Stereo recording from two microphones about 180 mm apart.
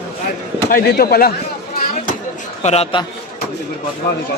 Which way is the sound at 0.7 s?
55° left (ahead or behind).